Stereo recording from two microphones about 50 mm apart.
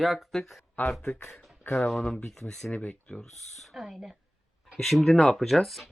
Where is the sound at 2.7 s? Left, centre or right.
Left.